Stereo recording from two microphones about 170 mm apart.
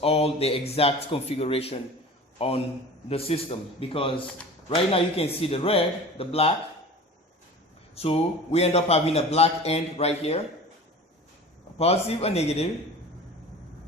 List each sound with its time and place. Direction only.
0.0 s a man's voice: 35° left (ahead or behind)
7.9 s a man's voice: 35° left (ahead or behind)
11.8 s a man's voice: 35° left (ahead or behind)